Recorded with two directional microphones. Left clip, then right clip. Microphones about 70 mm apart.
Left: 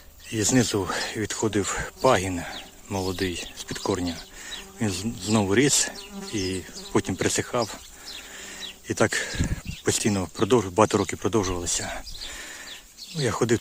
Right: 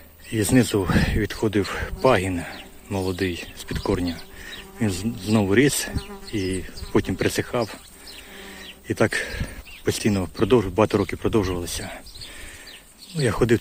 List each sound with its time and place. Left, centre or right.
0.3 s speech: centre
1.4 s speech: left
4.4 s bird: centre
4.9 s speech: left
8.9 s speech: left
9.4 s speech: left
10.0 s speech: left
10.8 s speech: left
13.1 s speech: centre